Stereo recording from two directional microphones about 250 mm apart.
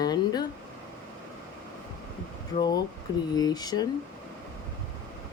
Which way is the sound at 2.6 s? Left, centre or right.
Centre.